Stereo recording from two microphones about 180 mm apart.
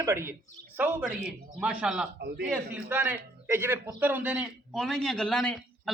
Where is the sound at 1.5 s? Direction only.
5° right (ahead or behind).